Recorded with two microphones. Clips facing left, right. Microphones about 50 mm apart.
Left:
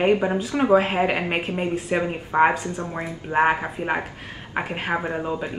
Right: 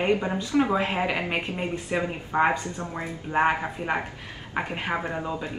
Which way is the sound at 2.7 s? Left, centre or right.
Left.